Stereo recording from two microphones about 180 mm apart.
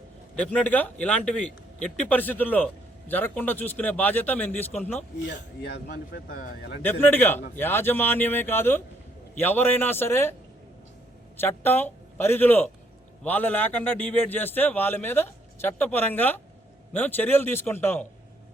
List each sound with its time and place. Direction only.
0.3 s a man's voice: 10° left (ahead or behind)
5.2 s speech: 75° left (ahead or behind); by 6.7 s 50° left (ahead or behind)
6.8 s a man's voice: 10° left (ahead or behind)
11.3 s a man's voice: 10° left (ahead or behind)